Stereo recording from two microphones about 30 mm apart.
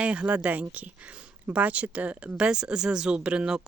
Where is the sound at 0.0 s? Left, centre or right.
Right.